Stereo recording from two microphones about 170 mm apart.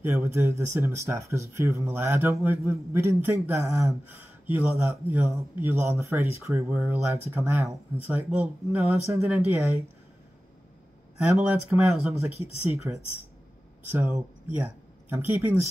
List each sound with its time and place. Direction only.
0.1 s speech: 15° right (ahead or behind)
11.1 s speech: 10° right (ahead or behind)